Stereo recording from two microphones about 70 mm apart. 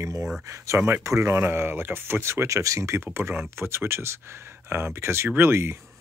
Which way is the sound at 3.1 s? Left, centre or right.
Right.